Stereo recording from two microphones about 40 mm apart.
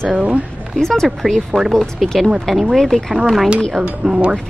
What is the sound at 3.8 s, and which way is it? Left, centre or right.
Speech, right.